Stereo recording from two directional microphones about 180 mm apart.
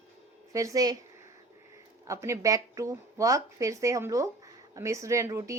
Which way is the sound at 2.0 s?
15° right (ahead or behind).